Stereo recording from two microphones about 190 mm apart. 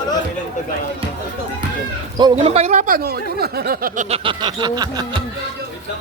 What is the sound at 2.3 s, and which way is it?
Speech, 35° right (ahead or behind).